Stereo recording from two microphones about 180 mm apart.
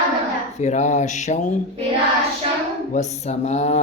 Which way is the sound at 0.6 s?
40° left (ahead or behind).